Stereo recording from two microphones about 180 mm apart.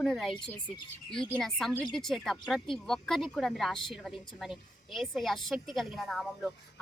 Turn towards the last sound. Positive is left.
turn(degrees=0)  # may be behind; listen again after turning